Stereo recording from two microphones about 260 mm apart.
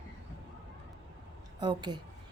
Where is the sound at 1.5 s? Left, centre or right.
Centre.